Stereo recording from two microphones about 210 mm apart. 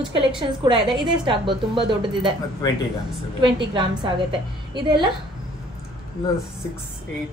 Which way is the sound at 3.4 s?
25° right (ahead or behind).